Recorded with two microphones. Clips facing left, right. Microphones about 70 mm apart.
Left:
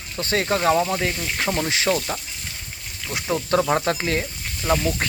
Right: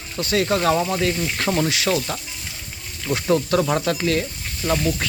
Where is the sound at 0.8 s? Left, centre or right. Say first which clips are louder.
Even; centre.